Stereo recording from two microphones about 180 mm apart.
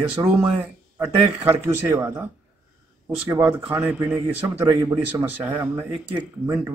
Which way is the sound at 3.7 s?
10° right (ahead or behind).